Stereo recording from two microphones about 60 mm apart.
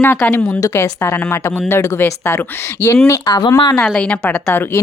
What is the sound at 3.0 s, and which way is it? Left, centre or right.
Speech, left.